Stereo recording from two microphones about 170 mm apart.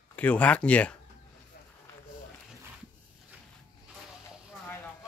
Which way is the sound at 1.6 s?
60° left (ahead or behind).